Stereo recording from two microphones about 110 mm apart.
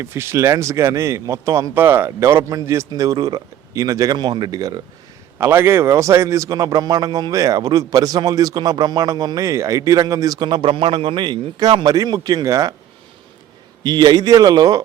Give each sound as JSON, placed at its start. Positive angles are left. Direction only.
{"t": 0.0, "sound": "speech", "side_deg": -25}
{"t": 5.4, "sound": "speech", "side_deg": -20}
{"t": 13.8, "sound": "speech", "side_deg": -40}